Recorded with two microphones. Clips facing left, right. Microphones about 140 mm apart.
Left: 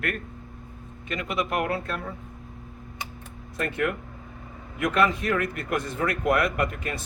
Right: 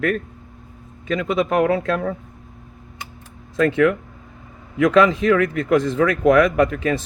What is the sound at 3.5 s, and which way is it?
Speech, 90° right.